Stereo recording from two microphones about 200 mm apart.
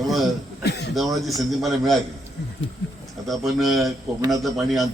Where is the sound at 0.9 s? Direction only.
Centre (ahead or behind).